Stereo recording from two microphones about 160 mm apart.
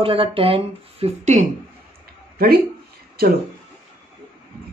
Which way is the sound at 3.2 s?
75° right (ahead or behind).